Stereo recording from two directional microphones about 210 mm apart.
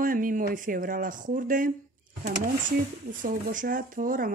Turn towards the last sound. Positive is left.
turn(degrees=-40)  # may be behind; listen again after turning